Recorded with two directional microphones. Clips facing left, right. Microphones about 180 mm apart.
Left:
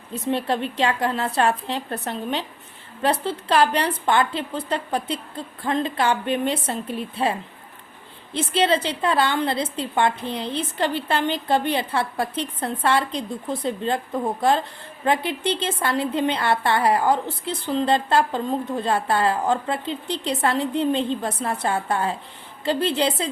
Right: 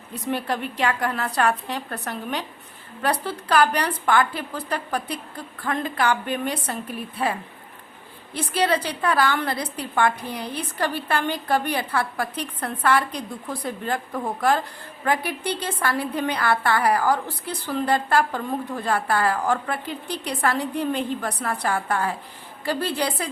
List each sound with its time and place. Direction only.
0.1 s a woman's voice: 25° left (ahead or behind)